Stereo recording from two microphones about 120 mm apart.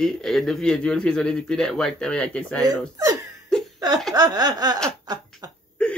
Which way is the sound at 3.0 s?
30° right (ahead or behind).